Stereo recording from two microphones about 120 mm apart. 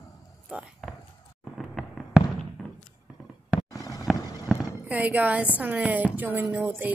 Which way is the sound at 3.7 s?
30° left (ahead or behind).